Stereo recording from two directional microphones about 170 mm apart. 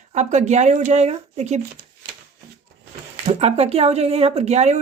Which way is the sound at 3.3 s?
40° right (ahead or behind).